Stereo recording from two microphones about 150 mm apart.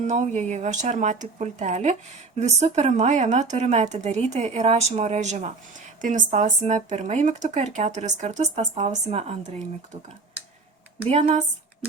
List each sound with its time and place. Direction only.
0.0 s speech: 50° right (ahead or behind)
11.0 s speech: 40° right (ahead or behind)